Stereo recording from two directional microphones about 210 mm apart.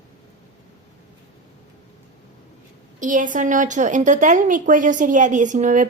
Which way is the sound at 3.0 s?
40° right (ahead or behind).